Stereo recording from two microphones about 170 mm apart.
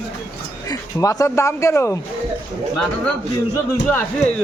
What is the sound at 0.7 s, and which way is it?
A man's voice, 20° left (ahead or behind).